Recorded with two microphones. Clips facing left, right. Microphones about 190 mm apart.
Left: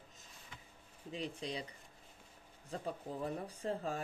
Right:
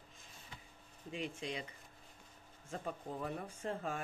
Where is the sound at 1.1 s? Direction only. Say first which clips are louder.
Even; 35° left (ahead or behind).